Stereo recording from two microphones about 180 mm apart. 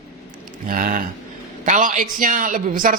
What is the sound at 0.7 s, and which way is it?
Speech, 50° right (ahead or behind).